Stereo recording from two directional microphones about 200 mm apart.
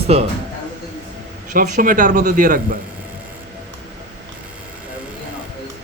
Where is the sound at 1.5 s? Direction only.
45° right (ahead or behind).